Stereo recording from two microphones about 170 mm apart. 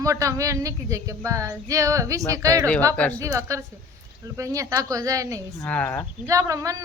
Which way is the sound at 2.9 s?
10° left (ahead or behind).